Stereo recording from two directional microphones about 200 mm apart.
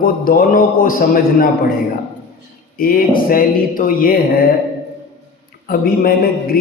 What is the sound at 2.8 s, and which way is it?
A man's voice, 45° left (ahead or behind).